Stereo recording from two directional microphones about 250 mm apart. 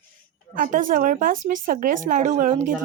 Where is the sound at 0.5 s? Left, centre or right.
Right.